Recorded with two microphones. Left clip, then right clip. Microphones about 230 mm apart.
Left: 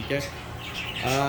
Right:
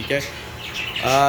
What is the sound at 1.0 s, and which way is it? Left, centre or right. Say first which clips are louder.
Speech: right 9 dB; centre.